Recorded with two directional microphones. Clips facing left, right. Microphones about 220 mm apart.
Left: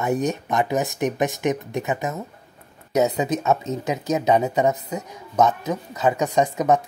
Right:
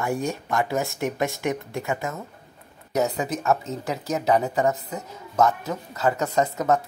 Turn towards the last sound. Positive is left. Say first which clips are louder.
# left 3 dB
turn(degrees=15)  # may be behind; listen again after turning